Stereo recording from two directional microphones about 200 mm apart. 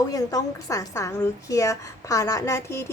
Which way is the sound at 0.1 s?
20° left (ahead or behind).